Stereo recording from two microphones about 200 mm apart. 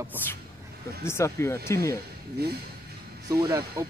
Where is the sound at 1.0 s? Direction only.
15° left (ahead or behind).